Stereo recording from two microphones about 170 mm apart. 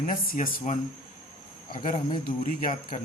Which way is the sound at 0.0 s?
55° left (ahead or behind).